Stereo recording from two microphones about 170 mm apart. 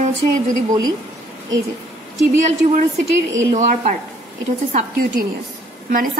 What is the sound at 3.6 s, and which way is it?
A woman's voice, 45° right (ahead or behind).